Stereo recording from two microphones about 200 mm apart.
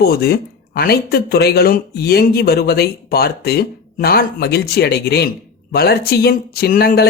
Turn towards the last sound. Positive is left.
turn(degrees=50)  # may be behind; listen again after turning